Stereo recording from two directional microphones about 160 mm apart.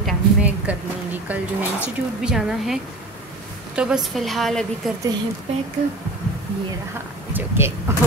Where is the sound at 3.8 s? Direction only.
5° right (ahead or behind).